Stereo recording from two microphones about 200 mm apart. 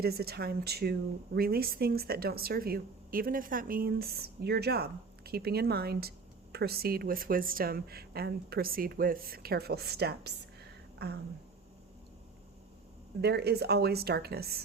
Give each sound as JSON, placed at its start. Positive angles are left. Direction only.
{"t": 0.0, "sound": "speech", "side_deg": -50}
{"t": 10.9, "sound": "a sound", "side_deg": -55}
{"t": 13.2, "sound": "speech", "side_deg": -55}